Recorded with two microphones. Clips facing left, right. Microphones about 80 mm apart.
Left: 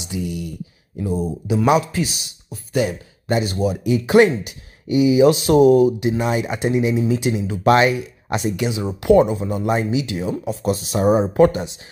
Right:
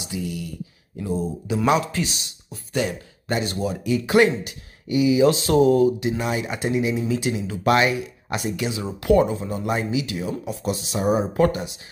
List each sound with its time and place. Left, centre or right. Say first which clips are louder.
0.9 s speech: left 3 dB; centre
10.4 s speech: left 5 dB; left
11.1 s speech: left 5 dB; left